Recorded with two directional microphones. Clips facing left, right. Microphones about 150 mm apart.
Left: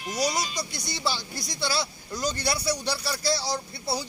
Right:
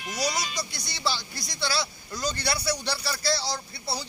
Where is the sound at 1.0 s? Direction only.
15° left (ahead or behind).